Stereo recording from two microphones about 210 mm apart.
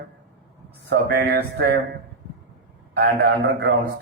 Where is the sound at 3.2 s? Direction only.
55° right (ahead or behind).